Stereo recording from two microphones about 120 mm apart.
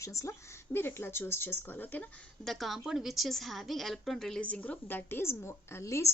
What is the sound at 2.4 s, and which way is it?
A woman's voice, centre (ahead or behind).